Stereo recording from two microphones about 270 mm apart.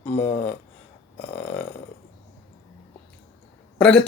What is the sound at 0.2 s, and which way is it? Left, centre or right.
Speech, centre.